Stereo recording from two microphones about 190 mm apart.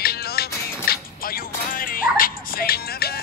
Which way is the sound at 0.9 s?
50° left (ahead or behind).